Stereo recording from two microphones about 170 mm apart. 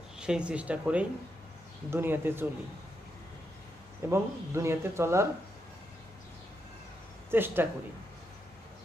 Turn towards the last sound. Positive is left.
turn(degrees=-10)  # may be behind; listen again after turning